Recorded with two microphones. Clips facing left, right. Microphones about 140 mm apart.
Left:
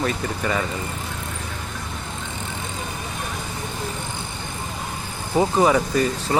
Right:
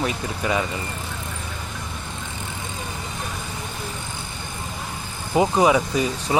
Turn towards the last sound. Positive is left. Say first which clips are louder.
# left 1 dB
turn(degrees=-10)  # may be behind; listen again after turning